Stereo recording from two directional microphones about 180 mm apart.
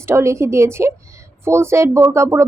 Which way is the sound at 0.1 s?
15° right (ahead or behind).